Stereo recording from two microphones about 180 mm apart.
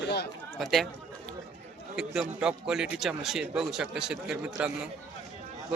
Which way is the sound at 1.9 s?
Centre (ahead or behind).